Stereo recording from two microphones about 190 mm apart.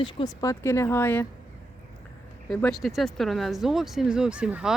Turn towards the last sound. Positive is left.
turn(degrees=-5)  # may be behind; listen again after turning